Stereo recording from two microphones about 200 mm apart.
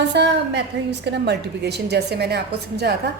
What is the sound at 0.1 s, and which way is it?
A woman's voice, 60° right (ahead or behind).